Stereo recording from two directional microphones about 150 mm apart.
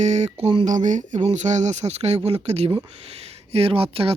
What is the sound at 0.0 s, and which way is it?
Speech, 50° right (ahead or behind).